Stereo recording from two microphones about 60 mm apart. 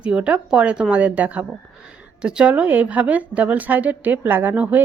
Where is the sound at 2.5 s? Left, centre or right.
Right.